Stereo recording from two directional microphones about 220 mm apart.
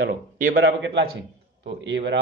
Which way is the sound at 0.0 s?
40° right (ahead or behind).